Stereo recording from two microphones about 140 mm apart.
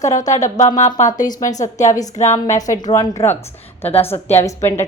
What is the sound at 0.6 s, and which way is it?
Speech, 60° left (ahead or behind).